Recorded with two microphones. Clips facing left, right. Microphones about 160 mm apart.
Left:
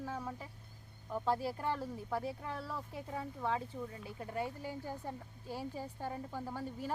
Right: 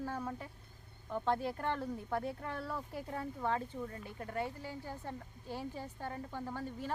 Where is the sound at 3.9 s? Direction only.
15° left (ahead or behind).